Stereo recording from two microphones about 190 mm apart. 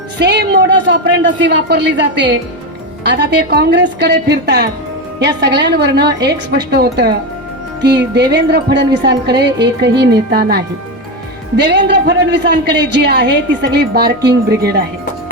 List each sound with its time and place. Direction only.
0.2 s a man's voice: 60° right (ahead or behind)
11.6 s a man's voice: 65° right (ahead or behind)